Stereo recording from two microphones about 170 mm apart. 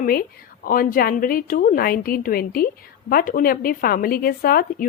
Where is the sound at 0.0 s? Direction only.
60° left (ahead or behind).